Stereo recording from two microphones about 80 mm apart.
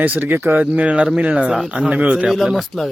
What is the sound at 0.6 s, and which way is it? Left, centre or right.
Speech, centre.